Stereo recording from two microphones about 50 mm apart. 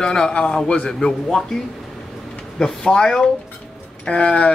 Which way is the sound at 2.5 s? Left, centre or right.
Centre.